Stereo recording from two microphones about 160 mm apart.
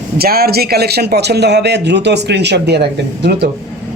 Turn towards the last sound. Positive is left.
turn(degrees=-90)